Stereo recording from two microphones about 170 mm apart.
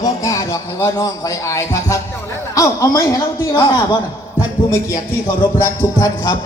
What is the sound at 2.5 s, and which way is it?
A man's voice, 20° left (ahead or behind).